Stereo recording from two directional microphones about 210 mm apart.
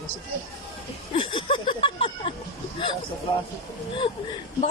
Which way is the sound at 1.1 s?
25° left (ahead or behind).